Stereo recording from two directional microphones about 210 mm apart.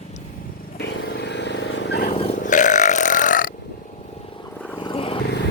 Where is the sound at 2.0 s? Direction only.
30° left (ahead or behind).